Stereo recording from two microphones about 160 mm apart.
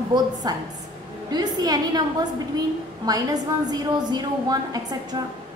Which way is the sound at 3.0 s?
25° right (ahead or behind).